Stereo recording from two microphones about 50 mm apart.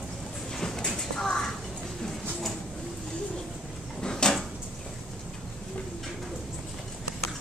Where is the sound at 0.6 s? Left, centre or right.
Centre.